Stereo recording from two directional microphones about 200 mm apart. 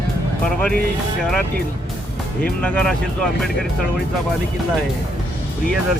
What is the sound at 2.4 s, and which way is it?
Speech, 5° left (ahead or behind).